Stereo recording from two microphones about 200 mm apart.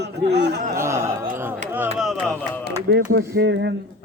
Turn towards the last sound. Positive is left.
turn(degrees=-60)  # may be behind; listen again after turning